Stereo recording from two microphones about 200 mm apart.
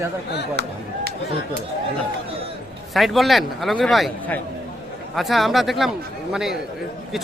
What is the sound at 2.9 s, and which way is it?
Speech, centre (ahead or behind).